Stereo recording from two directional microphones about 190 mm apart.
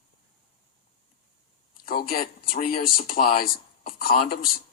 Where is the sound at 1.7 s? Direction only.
50° left (ahead or behind).